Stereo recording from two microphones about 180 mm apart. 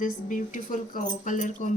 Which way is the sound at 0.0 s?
45° left (ahead or behind).